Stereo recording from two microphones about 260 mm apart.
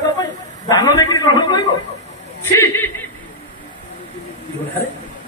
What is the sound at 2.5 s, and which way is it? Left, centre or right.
Chuckle, centre.